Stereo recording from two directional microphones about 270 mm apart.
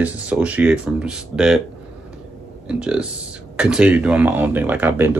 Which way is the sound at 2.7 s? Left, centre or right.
Centre.